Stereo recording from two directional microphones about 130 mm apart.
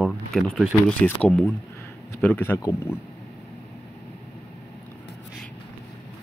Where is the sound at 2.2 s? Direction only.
10° left (ahead or behind).